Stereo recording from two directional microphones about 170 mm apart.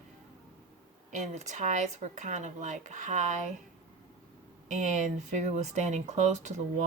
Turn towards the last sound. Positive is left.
turn(degrees=-45)  # may be behind; listen again after turning